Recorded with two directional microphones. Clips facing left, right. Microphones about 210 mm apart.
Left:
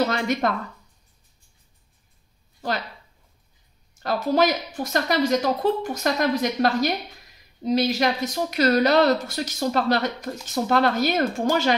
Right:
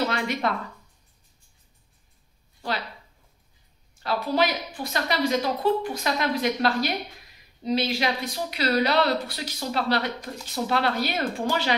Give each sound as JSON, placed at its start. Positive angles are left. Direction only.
{"t": 0.1, "sound": "speech", "side_deg": 45}
{"t": 3.9, "sound": "speech", "side_deg": 45}